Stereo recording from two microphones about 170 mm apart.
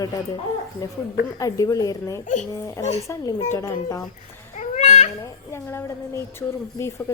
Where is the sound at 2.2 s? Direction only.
45° left (ahead or behind).